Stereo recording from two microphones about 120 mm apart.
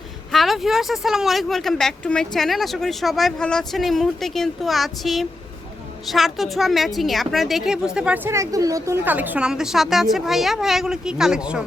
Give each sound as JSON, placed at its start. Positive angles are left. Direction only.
{"t": 0.3, "sound": "speech", "side_deg": 0}
{"t": 8.3, "sound": "a woman's voice", "side_deg": -25}
{"t": 9.0, "sound": "speech", "side_deg": -15}